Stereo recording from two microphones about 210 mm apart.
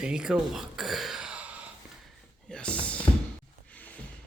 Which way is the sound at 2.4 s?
5° left (ahead or behind).